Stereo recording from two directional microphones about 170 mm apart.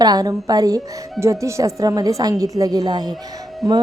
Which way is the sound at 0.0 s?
20° right (ahead or behind).